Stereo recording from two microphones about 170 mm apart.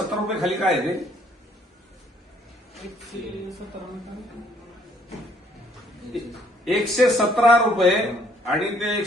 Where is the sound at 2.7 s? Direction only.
Centre (ahead or behind).